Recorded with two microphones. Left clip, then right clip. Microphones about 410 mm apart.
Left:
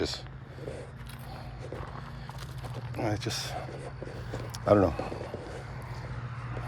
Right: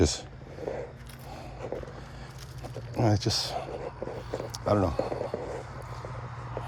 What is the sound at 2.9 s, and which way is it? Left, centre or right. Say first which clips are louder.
Speech: right 5 dB; right.